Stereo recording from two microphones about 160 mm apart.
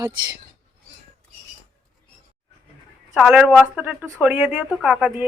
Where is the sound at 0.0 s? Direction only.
25° right (ahead or behind).